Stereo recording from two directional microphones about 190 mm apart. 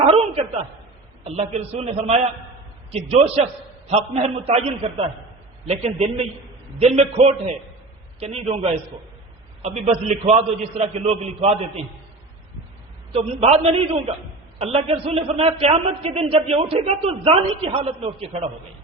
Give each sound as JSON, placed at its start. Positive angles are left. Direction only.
{"t": 0.0, "sound": "a sound", "side_deg": -30}
{"t": 1.2, "sound": "a man's voice", "side_deg": -35}
{"t": 13.1, "sound": "a man's voice", "side_deg": -30}